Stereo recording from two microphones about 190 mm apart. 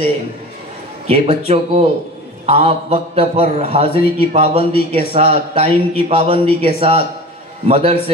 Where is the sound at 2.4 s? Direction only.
30° right (ahead or behind).